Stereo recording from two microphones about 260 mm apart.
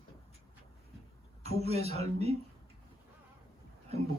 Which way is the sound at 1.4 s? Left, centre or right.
Right.